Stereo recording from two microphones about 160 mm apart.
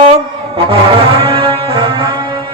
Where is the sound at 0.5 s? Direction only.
35° right (ahead or behind).